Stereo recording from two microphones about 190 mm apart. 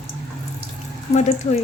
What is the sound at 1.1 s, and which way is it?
Speech, 35° left (ahead or behind).